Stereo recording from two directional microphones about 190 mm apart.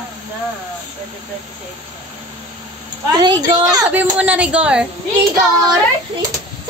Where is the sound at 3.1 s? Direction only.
20° right (ahead or behind).